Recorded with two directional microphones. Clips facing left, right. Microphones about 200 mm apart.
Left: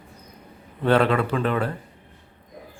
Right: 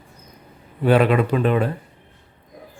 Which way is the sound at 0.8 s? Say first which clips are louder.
Right 3 dB; 15° right (ahead or behind).